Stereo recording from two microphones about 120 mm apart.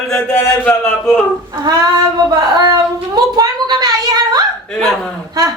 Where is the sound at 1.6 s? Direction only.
35° right (ahead or behind).